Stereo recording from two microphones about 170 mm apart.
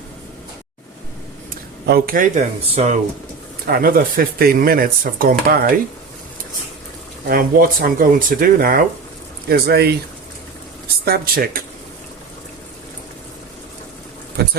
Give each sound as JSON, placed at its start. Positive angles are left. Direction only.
{"t": 1.9, "sound": "speech", "side_deg": -55}
{"t": 3.7, "sound": "speech", "side_deg": -60}
{"t": 7.3, "sound": "speech", "side_deg": -55}
{"t": 9.5, "sound": "speech", "side_deg": -70}
{"t": 11.0, "sound": "speech", "side_deg": -60}
{"t": 14.4, "sound": "speech", "side_deg": -70}